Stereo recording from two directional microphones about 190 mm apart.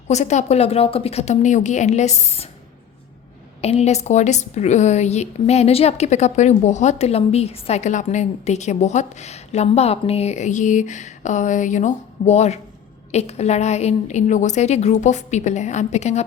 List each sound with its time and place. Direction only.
0.1 s a woman's voice: 35° left (ahead or behind)
3.6 s a woman's voice: 35° left (ahead or behind)